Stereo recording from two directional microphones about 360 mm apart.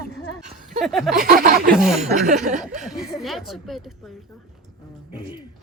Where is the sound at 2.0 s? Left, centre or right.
Centre.